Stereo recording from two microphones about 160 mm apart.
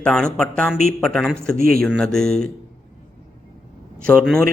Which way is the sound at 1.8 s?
Centre (ahead or behind).